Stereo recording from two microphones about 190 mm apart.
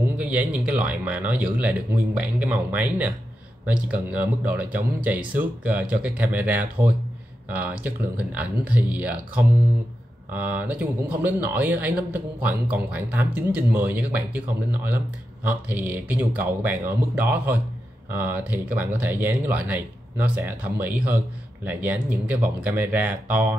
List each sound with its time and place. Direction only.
0.0 s speech: 5° right (ahead or behind)